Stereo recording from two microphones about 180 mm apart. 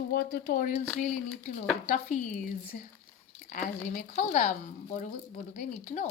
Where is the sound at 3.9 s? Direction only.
40° left (ahead or behind).